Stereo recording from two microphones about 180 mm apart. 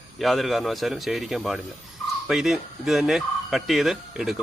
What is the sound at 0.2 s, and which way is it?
Speech, centre (ahead or behind).